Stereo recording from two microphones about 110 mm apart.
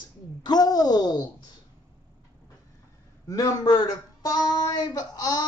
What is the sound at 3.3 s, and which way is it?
Speech, 30° left (ahead or behind).